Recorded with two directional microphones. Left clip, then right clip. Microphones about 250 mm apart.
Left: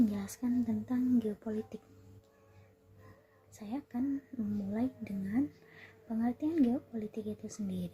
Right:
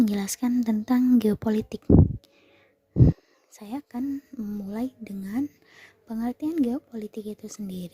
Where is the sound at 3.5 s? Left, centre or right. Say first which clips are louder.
Right 6 dB; right.